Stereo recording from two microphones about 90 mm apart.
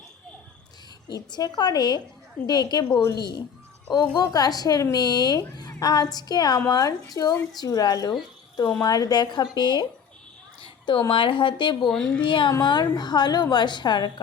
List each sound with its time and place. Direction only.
1.0 s speech: 55° left (ahead or behind)
10.6 s a sound: 65° left (ahead or behind)
11.1 s speech: 70° left (ahead or behind)
11.9 s a woman's voice: 5° left (ahead or behind)
12.2 s speech: 65° left (ahead or behind)
12.5 s speech: 50° left (ahead or behind)